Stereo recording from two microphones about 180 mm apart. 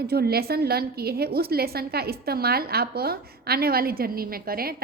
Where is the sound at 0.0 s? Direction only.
60° right (ahead or behind).